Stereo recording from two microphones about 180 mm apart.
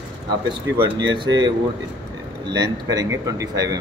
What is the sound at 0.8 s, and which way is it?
A man's voice, 25° right (ahead or behind).